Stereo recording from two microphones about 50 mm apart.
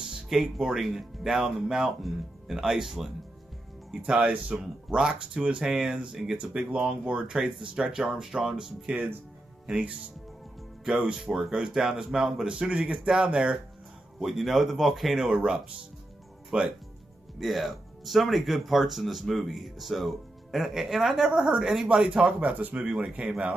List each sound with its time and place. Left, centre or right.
0.3 s speech: centre
4.2 s speech: right; by 6.3 s centre
6.3 s speech: right
7.3 s speech: centre
11.0 s speech: centre
12.9 s speech: centre
14.2 s speech: centre
16.5 s speech: centre
17.4 s speech: centre
22.4 s speech: right
22.8 s speech: centre